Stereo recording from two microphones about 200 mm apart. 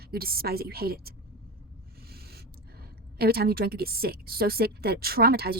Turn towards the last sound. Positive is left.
turn(degrees=-50)  # may be behind; listen again after turning